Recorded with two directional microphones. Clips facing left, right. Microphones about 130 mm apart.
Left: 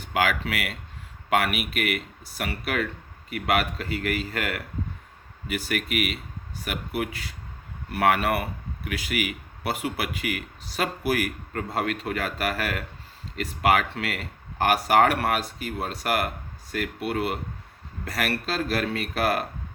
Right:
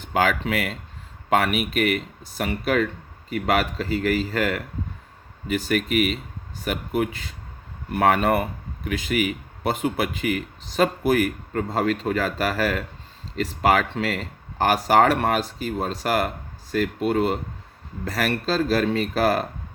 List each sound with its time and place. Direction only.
0.1 s a man's voice: 30° right (ahead or behind)